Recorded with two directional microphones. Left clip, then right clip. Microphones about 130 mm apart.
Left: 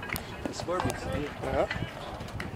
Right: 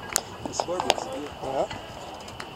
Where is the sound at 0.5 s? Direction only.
20° left (ahead or behind).